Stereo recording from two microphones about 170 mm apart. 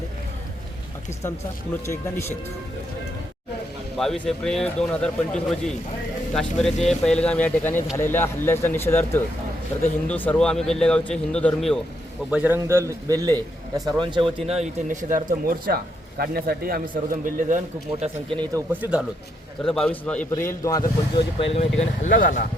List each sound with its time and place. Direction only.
3.9 s a man's voice: centre (ahead or behind)
12.3 s speech: 10° right (ahead or behind); by 17.6 s 55° right (ahead or behind)
18.0 s speech: 30° right (ahead or behind)
18.5 s speech: 10° right (ahead or behind)
19.6 s a man's voice: 5° left (ahead or behind); by 21.2 s 20° left (ahead or behind)
21.5 s speech: 40° left (ahead or behind)